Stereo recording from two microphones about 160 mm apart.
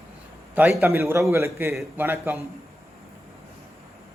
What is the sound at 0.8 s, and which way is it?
A man's voice, 15° right (ahead or behind).